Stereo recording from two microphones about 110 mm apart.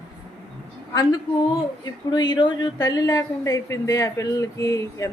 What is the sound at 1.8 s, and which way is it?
A woman's voice, 40° left (ahead or behind).